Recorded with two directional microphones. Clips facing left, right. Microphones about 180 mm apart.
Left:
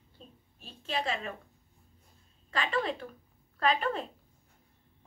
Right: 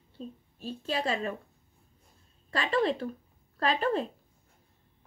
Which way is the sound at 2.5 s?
35° right (ahead or behind).